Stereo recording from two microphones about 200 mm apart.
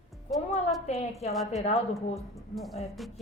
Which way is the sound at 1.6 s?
30° left (ahead or behind).